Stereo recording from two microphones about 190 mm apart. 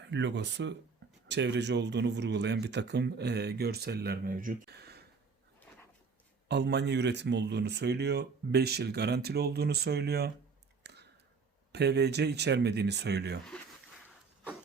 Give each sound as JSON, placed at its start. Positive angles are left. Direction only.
{"t": 0.1, "sound": "speech", "side_deg": -65}
{"t": 6.5, "sound": "speech", "side_deg": -60}
{"t": 10.8, "sound": "a sound", "side_deg": -60}
{"t": 11.7, "sound": "speech", "side_deg": -60}